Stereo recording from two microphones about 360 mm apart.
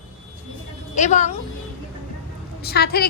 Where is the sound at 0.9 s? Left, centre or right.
Centre.